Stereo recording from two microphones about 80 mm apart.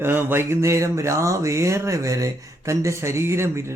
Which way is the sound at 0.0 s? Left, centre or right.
Right.